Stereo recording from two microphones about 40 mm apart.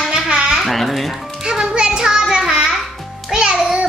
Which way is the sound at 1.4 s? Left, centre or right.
Centre.